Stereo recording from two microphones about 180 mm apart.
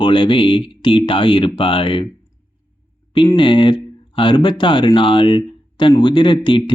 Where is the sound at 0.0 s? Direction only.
25° left (ahead or behind).